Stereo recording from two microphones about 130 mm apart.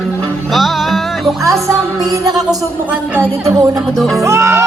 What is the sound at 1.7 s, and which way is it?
Music, 25° right (ahead or behind).